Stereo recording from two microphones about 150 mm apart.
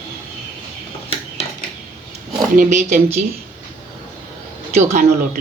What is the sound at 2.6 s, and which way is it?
Speech, 55° right (ahead or behind).